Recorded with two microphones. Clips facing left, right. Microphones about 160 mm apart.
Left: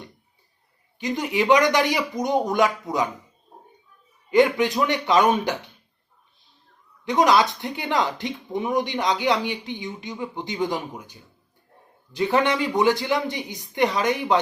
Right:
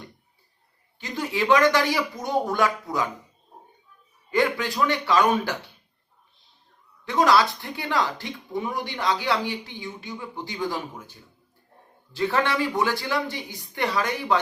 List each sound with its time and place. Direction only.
0.9 s speech: 20° left (ahead or behind)
4.3 s speech: 20° left (ahead or behind)
7.0 s speech: 20° left (ahead or behind)